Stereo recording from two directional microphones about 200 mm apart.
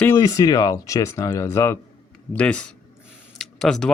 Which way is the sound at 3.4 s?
Centre (ahead or behind).